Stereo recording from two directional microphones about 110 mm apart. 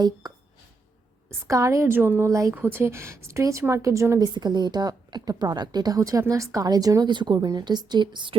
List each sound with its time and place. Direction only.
0.0 s a woman's voice: 35° right (ahead or behind)
1.5 s a woman's voice: 30° right (ahead or behind)
4.4 s a woman's voice: 40° right (ahead or behind)